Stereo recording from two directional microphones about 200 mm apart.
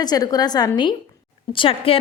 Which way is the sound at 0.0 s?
20° left (ahead or behind).